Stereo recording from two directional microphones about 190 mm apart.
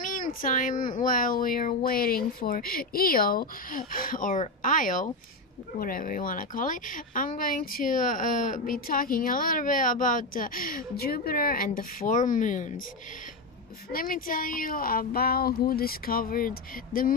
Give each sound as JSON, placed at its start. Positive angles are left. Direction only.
{"t": 0.0, "sound": "speech", "side_deg": 45}
{"t": 13.9, "sound": "speech", "side_deg": 50}